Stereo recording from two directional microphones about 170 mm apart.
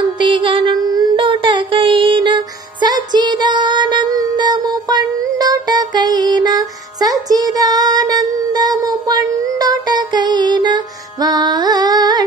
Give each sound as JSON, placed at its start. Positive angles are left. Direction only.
{"t": 0.2, "sound": "music", "side_deg": -30}
{"t": 7.5, "sound": "a sound", "side_deg": -20}
{"t": 9.4, "sound": "music", "side_deg": -20}